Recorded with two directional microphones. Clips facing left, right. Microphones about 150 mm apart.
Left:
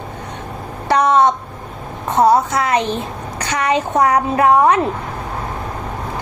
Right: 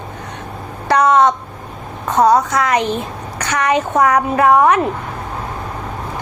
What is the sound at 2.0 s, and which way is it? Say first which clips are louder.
A woman's voice: even; 25° left (ahead or behind).